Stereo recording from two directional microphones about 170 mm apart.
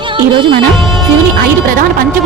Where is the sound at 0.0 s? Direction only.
30° right (ahead or behind).